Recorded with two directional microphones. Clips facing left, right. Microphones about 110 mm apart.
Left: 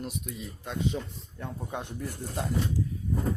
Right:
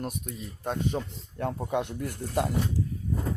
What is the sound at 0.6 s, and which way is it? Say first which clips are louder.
Speech: right 2 dB; 50° right (ahead or behind).